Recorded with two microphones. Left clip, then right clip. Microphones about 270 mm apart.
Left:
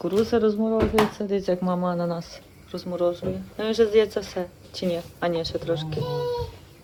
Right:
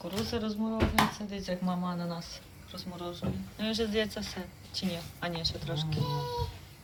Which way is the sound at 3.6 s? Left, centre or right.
Centre.